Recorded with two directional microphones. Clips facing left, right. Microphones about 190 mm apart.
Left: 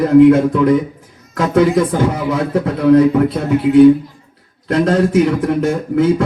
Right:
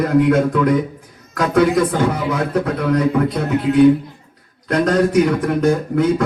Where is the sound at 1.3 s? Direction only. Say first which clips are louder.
Left 2 dB; 25° left (ahead or behind).